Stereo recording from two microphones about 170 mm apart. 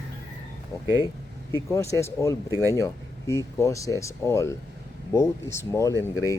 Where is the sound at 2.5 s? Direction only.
15° right (ahead or behind).